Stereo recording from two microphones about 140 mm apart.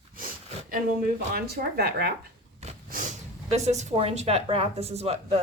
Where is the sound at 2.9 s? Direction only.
70° right (ahead or behind).